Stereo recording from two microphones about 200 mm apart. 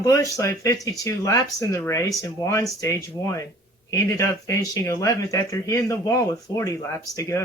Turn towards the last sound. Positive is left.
turn(degrees=15)  # may be behind; listen again after turning